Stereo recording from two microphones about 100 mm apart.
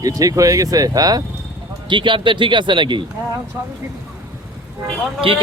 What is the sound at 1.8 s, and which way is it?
Speech, 55° right (ahead or behind).